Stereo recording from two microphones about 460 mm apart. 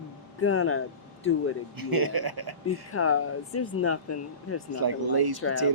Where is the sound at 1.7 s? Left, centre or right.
Right.